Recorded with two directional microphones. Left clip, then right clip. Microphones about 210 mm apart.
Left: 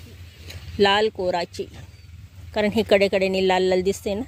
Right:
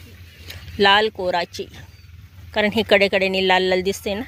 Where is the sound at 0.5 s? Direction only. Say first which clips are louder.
Right 4 dB; 5° left (ahead or behind).